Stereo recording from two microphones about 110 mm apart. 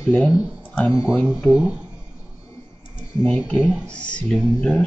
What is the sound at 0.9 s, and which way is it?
Speech, 25° left (ahead or behind).